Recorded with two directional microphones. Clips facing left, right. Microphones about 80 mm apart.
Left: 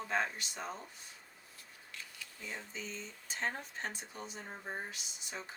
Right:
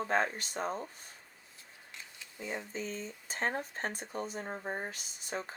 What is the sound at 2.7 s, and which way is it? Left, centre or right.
Speech, right.